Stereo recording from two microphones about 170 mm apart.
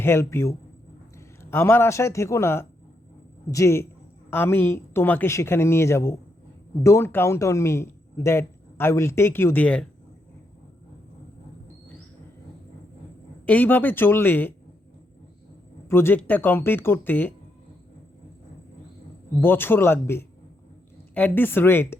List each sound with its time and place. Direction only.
0.0 s speech: 15° left (ahead or behind)
13.4 s speech: 10° left (ahead or behind)
15.9 s speech: 15° left (ahead or behind)
19.4 s speech: 10° left (ahead or behind)